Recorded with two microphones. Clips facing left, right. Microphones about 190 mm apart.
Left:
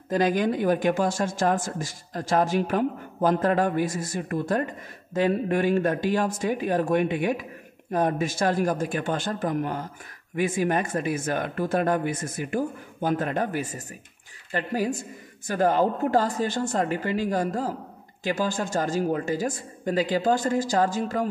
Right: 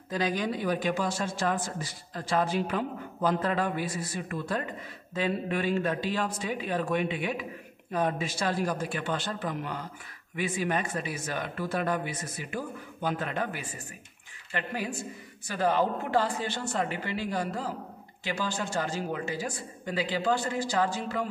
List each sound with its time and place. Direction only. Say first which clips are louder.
0.1 s speech: left 7 dB; 50° left (ahead or behind)